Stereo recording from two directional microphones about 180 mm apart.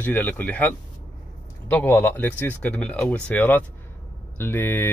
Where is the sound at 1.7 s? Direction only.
10° left (ahead or behind).